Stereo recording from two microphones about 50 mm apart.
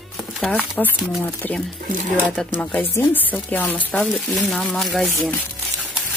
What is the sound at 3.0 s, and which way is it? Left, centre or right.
Speech, left.